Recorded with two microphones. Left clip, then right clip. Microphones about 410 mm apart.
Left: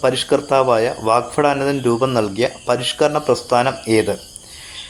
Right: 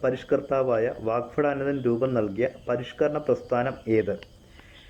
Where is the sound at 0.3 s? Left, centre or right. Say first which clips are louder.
Left 9 dB; centre.